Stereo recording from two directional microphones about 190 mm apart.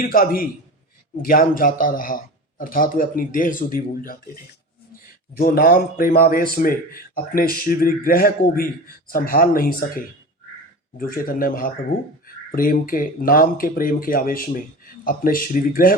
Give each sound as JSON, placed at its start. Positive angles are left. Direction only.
{"t": 0.1, "sound": "a man's voice", "side_deg": 50}
{"t": 5.4, "sound": "a man's voice", "side_deg": 50}